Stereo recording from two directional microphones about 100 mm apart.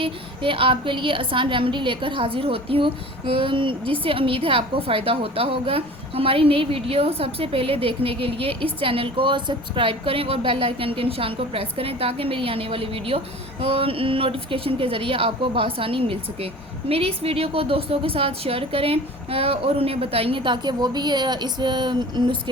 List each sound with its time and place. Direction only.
0.0 s a woman's voice: 60° right (ahead or behind)